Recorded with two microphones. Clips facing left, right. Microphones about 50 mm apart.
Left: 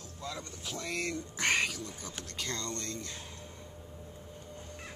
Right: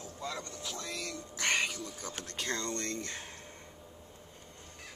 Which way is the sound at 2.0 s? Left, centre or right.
Right.